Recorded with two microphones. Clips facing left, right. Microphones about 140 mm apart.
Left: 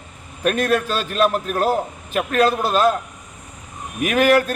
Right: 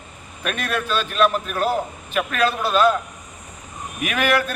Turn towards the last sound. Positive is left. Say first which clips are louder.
# left 5 dB
turn(degrees=40)  # may be behind; listen again after turning